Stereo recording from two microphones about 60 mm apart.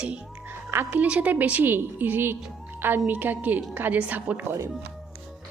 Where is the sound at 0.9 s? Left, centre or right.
Right.